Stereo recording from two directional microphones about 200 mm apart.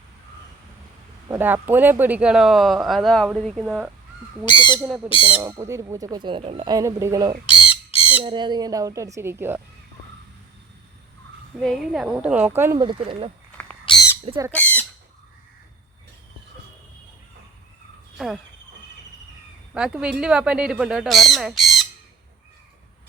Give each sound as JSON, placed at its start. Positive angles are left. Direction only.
{"t": 1.3, "sound": "speech", "side_deg": -10}
{"t": 4.4, "sound": "speech", "side_deg": 20}
{"t": 4.8, "sound": "speech", "side_deg": -10}
{"t": 5.0, "sound": "speech", "side_deg": 25}
{"t": 5.3, "sound": "speech", "side_deg": -10}
{"t": 6.7, "sound": "speech", "side_deg": -15}
{"t": 7.6, "sound": "squawk", "side_deg": 30}
{"t": 8.2, "sound": "speech", "side_deg": -20}
{"t": 11.6, "sound": "speech", "side_deg": 0}
{"t": 12.8, "sound": "speech", "side_deg": -25}
{"t": 13.9, "sound": "squawk", "side_deg": 25}
{"t": 14.5, "sound": "squawk", "side_deg": 10}
{"t": 19.7, "sound": "speech", "side_deg": -5}